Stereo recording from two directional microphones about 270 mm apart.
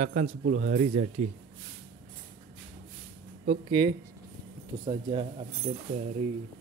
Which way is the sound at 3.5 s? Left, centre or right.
Centre.